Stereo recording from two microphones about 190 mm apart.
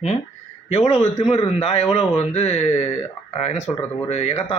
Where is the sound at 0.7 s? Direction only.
35° left (ahead or behind).